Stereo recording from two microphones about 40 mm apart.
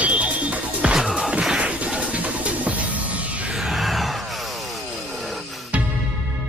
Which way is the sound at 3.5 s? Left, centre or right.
Centre.